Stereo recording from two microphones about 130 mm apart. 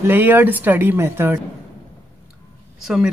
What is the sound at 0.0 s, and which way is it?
Speech, 15° right (ahead or behind).